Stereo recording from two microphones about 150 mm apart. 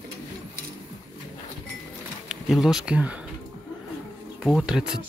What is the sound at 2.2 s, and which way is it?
Speech, centre (ahead or behind).